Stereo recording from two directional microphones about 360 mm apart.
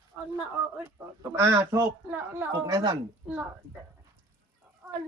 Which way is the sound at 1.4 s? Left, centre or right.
Centre.